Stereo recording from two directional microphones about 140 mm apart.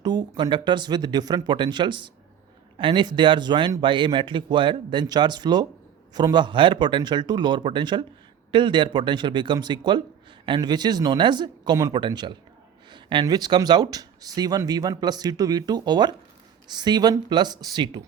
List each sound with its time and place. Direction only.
0.0 s speech: 30° right (ahead or behind)